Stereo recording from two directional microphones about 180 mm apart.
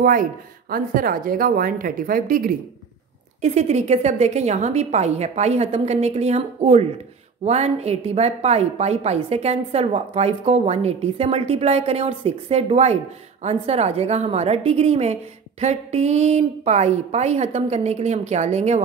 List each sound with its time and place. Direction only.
0.0 s speech: 50° right (ahead or behind)
3.3 s a woman's voice: 35° right (ahead or behind)